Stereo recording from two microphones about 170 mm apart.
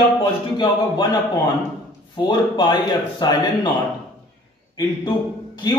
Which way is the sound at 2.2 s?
25° left (ahead or behind).